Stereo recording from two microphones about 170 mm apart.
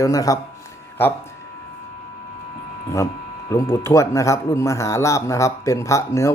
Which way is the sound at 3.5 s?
15° left (ahead or behind).